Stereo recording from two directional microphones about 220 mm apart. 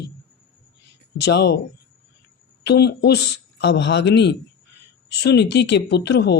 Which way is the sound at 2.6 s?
50° left (ahead or behind).